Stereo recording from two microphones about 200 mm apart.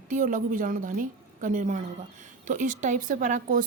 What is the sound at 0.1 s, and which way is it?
Speech, 40° right (ahead or behind).